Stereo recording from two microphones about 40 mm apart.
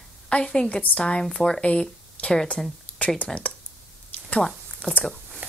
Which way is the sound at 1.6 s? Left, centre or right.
Left.